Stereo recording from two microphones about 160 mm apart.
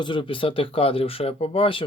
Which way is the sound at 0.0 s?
30° left (ahead or behind).